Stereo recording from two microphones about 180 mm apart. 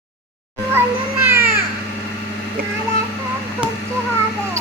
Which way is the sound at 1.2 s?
15° right (ahead or behind).